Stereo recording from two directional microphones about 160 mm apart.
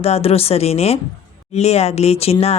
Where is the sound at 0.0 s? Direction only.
40° left (ahead or behind).